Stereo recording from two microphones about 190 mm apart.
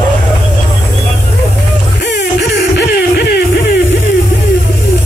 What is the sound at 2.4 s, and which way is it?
Music, 65° left (ahead or behind).